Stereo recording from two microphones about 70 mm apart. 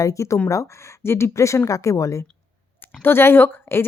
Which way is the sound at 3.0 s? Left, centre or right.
Left.